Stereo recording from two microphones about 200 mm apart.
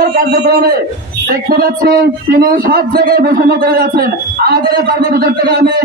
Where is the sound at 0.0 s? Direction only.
45° right (ahead or behind).